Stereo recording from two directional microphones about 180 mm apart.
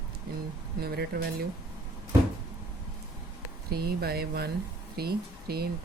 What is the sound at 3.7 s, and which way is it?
Speech, 60° right (ahead or behind).